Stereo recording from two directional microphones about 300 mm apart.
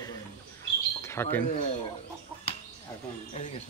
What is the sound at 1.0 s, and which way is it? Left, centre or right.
Bird, centre.